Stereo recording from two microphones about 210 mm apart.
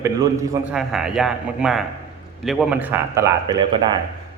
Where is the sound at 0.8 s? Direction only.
5° right (ahead or behind); by 4.0 s 20° right (ahead or behind).